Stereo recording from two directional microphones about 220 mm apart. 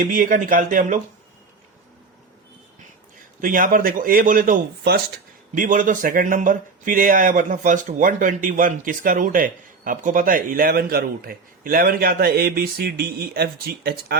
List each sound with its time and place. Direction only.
0.0 s speech: 40° right (ahead or behind)
3.4 s speech: 40° right (ahead or behind)